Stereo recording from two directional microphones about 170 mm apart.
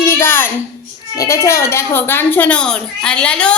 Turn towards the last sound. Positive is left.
turn(degrees=5)  # may be behind; listen again after turning